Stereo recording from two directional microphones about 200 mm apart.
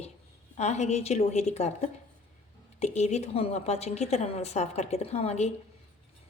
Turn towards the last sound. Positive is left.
turn(degrees=30)  # may be behind; listen again after turning